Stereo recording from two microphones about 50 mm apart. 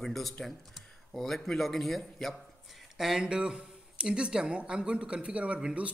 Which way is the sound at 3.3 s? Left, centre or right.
Centre.